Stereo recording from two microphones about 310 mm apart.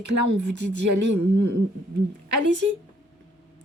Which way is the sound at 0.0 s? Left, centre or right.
Right.